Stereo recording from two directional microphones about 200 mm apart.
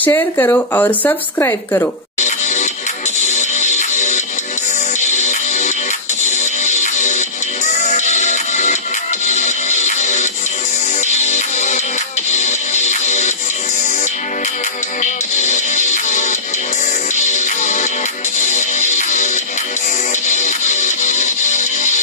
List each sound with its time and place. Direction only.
0.0 s speech: 10° left (ahead or behind)
2.1 s music: 35° left (ahead or behind)
15.3 s music: 35° left (ahead or behind)